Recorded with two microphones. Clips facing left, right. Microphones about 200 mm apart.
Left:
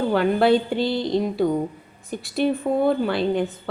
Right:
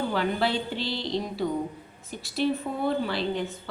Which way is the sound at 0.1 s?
50° left (ahead or behind).